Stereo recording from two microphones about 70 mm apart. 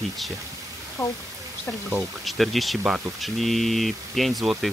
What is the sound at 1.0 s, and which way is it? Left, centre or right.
Speech, left.